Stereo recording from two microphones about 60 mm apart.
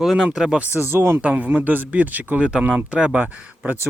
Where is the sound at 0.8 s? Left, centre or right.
Right.